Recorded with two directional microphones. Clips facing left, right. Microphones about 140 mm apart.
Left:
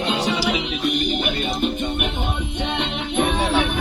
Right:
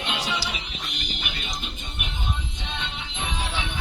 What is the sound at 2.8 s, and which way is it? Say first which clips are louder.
Music: left 12 dB; 60° left (ahead or behind).